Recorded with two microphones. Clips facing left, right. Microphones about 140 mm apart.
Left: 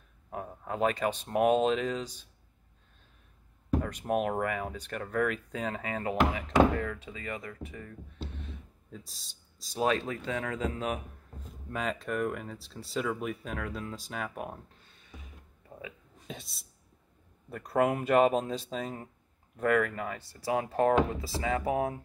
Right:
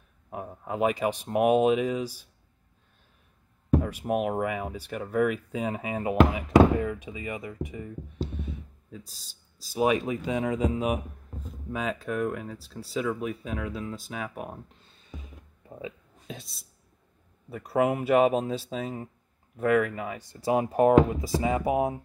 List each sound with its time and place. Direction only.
0.3 s speech: 10° right (ahead or behind)
3.8 s speech: 5° right (ahead or behind)
11.7 s speech: 5° right (ahead or behind)
16.3 s speech: centre (ahead or behind)
20.2 s speech: 20° right (ahead or behind)